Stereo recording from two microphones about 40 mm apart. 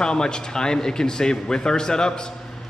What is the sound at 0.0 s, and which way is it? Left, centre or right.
A man's voice, centre.